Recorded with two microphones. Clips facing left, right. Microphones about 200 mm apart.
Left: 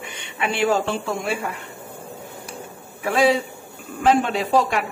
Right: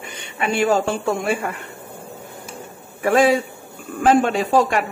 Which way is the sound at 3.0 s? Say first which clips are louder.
Right 3 dB; 50° right (ahead or behind).